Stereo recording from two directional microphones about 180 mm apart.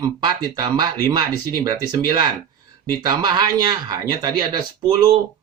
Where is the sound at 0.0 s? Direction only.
25° right (ahead or behind).